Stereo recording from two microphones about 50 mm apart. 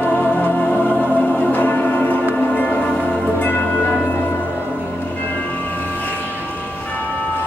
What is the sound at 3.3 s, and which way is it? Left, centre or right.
Music, left.